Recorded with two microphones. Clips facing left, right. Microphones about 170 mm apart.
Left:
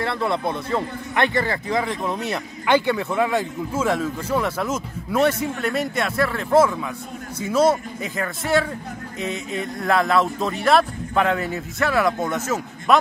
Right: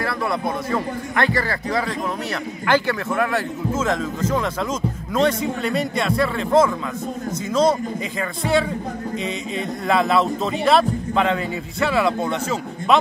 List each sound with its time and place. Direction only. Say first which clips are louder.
0.0 s a man's voice: even; 25° left (ahead or behind); by 12.1 s centre (ahead or behind)